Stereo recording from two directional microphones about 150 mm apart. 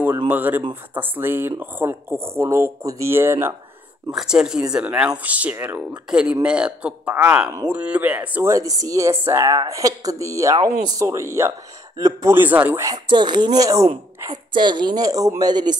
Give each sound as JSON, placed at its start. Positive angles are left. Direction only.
{"t": 0.3, "sound": "speech", "side_deg": -10}
{"t": 4.1, "sound": "speech", "side_deg": -5}
{"t": 12.9, "sound": "speech", "side_deg": -30}